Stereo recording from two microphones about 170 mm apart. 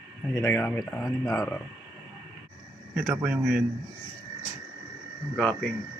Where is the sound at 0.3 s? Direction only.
15° left (ahead or behind).